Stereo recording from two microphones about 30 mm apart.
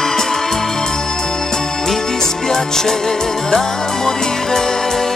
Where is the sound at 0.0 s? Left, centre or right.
Centre.